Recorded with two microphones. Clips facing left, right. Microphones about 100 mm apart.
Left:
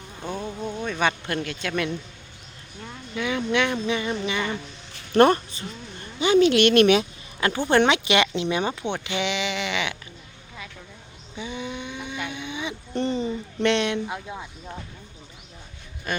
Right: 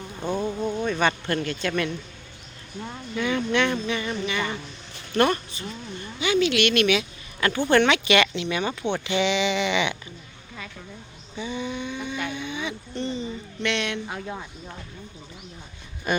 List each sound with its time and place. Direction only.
0.2 s a sound: 10° right (ahead or behind)
0.9 s speech: 5° left (ahead or behind)
3.2 s speech: 5° left (ahead or behind)
5.1 s speech: 35° left (ahead or behind)
7.3 s speech: 20° left (ahead or behind)
11.3 s a sound: 15° left (ahead or behind)
12.9 s a sound: 50° left (ahead or behind)
13.6 s speech: 30° left (ahead or behind)
16.1 s speech: 5° right (ahead or behind)